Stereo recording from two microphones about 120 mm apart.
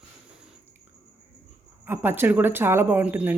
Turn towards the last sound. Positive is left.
turn(degrees=-15)  # may be behind; listen again after turning